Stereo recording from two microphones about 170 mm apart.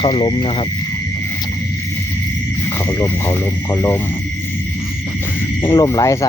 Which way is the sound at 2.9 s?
20° left (ahead or behind).